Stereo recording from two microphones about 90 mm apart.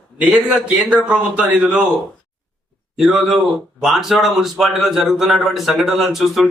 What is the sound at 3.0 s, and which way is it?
Speech, centre (ahead or behind).